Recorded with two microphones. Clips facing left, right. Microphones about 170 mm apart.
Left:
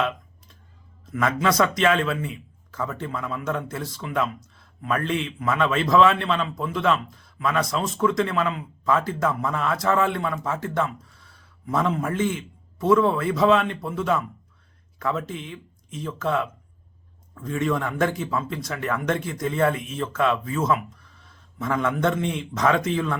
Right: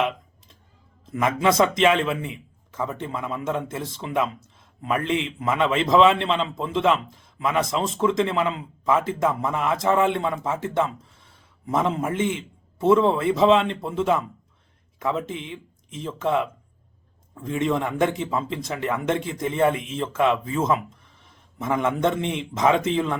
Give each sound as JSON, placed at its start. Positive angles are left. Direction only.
{"t": 1.0, "sound": "speech", "side_deg": -25}